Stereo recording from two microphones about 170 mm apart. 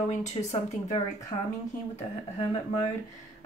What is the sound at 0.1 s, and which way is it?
Speech, 45° left (ahead or behind).